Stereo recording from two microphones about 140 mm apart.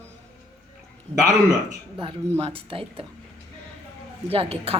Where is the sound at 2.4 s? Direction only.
40° right (ahead or behind).